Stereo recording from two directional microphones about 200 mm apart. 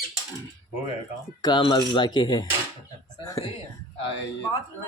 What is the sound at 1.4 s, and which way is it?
Speech, 20° left (ahead or behind).